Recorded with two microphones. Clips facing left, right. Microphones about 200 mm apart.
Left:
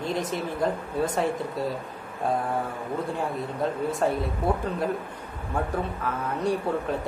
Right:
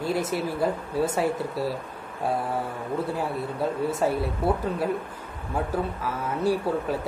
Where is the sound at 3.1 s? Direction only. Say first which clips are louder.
Right 1 dB; 5° right (ahead or behind).